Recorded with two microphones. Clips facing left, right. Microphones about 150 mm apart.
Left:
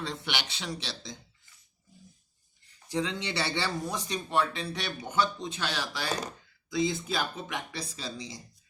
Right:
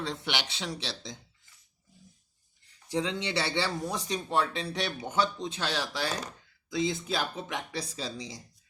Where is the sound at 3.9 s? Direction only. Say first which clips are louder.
Right 1 dB; 35° right (ahead or behind).